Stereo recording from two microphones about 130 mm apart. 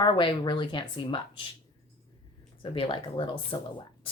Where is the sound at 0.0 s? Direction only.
35° left (ahead or behind).